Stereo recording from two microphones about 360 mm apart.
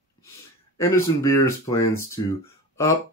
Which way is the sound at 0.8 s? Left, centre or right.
Centre.